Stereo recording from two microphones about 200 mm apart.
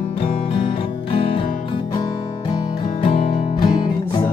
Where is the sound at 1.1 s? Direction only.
25° left (ahead or behind).